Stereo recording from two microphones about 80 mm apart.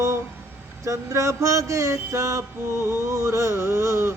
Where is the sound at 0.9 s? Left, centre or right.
Right.